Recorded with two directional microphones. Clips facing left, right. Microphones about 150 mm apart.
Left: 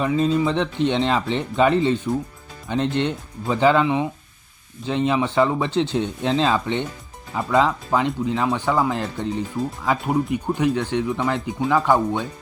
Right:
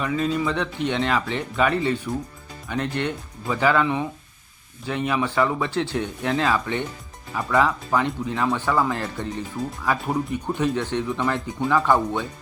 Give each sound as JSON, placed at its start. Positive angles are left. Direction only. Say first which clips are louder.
{"t": 0.0, "sound": "speech", "louder": "left 4 dB", "side_deg": 30}